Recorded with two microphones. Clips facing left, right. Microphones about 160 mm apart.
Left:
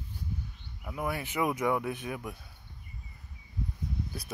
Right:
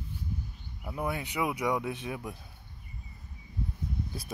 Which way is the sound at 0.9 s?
20° right (ahead or behind).